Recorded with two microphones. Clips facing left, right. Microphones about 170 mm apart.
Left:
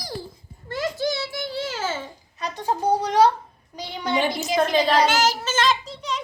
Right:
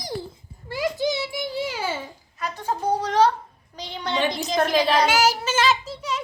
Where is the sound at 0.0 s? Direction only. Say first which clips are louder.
Right 2 dB; 20° right (ahead or behind).